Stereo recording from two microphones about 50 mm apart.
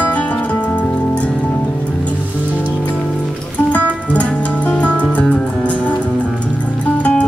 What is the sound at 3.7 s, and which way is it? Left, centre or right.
Music, left.